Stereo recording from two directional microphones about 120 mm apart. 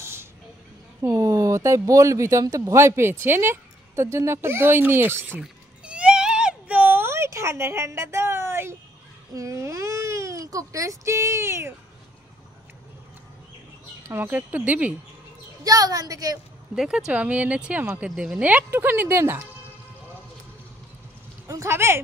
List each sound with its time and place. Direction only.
0.0 s a sound: 20° right (ahead or behind)
1.0 s speech: 25° right (ahead or behind)
5.4 s a sound: 10° right (ahead or behind)
9.3 s speech: 25° right (ahead or behind)
14.0 s speech: 20° right (ahead or behind)
15.6 s a woman's voice: 30° right (ahead or behind)
16.7 s speech: 5° right (ahead or behind); by 19.4 s 20° right (ahead or behind)
21.5 s speech: 25° right (ahead or behind)